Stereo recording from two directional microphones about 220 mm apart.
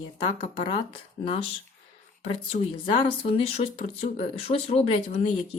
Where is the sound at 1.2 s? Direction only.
25° left (ahead or behind).